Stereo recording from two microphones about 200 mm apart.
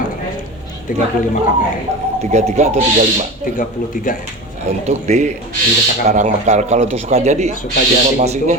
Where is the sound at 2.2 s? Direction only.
35° right (ahead or behind).